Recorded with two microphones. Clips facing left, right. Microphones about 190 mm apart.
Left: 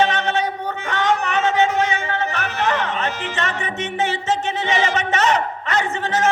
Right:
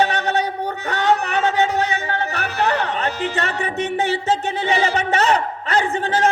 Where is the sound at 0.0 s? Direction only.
35° right (ahead or behind).